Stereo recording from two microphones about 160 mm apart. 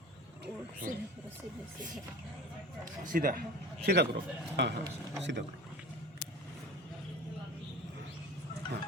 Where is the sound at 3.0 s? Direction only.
60° right (ahead or behind).